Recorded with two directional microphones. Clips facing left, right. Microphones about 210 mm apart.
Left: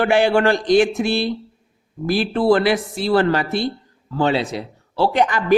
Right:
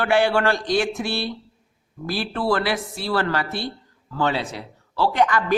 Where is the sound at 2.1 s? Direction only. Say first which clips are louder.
Left 7 dB; 20° left (ahead or behind).